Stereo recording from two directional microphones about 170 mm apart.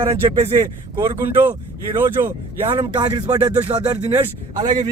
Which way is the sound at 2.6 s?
30° right (ahead or behind).